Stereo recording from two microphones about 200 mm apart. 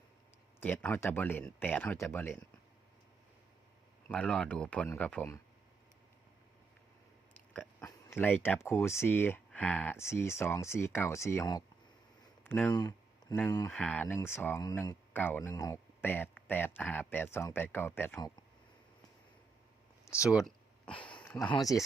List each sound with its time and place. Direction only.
0.6 s speech: 10° left (ahead or behind)
4.1 s speech: 5° left (ahead or behind)
7.3 s speech: 10° left (ahead or behind)
12.2 s a sound: 10° left (ahead or behind)
12.7 s speech: 20° left (ahead or behind)
13.7 s speech: 5° left (ahead or behind)
20.1 s speech: 15° left (ahead or behind)
20.3 s a sound: 5° left (ahead or behind)
21.5 s speech: 20° left (ahead or behind)